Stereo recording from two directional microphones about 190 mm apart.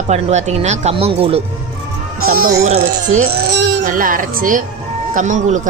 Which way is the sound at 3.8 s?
45° right (ahead or behind).